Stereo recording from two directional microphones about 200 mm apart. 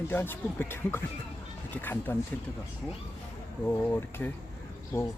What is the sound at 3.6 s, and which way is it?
Speech, 10° left (ahead or behind).